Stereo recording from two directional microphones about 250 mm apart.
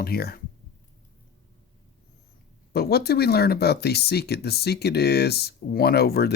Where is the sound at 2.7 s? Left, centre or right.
Left.